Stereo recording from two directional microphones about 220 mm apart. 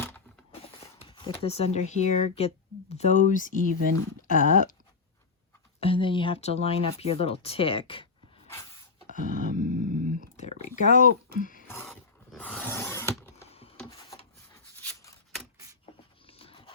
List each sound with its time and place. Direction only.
0.6 s speech: 25° left (ahead or behind)
5.8 s speech: 25° left (ahead or behind)
9.0 s dog: 40° right (ahead or behind)
10.3 s a sound: 30° left (ahead or behind)
10.8 s speech: 35° left (ahead or behind)
12.3 s a sound: 5° left (ahead or behind)
13.5 s rub: 25° left (ahead or behind)
14.5 s a sound: 10° left (ahead or behind)
16.2 s horse: 25° left (ahead or behind)